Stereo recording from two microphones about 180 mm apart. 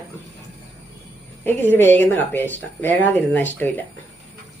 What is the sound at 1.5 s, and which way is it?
Speech, 10° left (ahead or behind).